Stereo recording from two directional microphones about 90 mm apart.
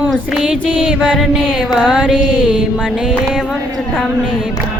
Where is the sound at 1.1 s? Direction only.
Centre (ahead or behind).